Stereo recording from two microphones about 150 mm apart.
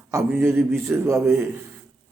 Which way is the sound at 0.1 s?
15° right (ahead or behind).